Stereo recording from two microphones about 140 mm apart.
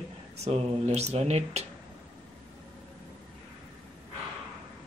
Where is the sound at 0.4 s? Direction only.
50° right (ahead or behind).